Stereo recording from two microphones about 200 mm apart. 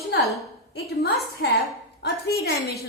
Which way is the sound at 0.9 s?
50° left (ahead or behind).